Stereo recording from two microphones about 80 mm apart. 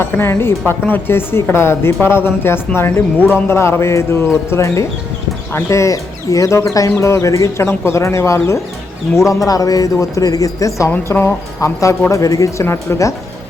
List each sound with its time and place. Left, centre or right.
0.0 s a woman's voice: left
10.9 s a woman's voice: left
12.6 s speech: left